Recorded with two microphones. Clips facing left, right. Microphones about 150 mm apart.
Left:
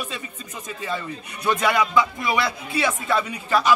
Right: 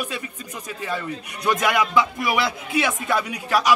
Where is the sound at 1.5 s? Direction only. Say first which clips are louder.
Even; 15° right (ahead or behind).